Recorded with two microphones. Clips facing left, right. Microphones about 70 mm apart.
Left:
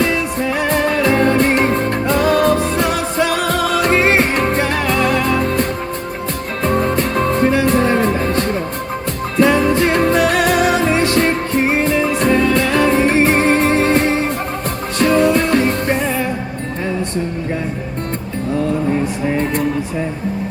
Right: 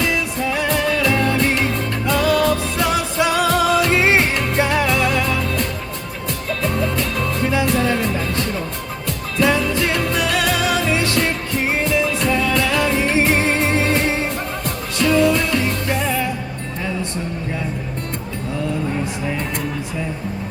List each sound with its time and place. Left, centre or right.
0.0 s music: left
19.3 s music: left